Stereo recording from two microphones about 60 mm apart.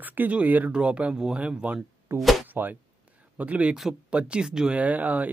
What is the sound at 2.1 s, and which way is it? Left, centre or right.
Speech, right.